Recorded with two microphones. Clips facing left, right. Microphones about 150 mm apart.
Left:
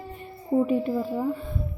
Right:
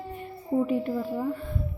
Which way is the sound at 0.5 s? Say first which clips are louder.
Left 3 dB; 20° left (ahead or behind).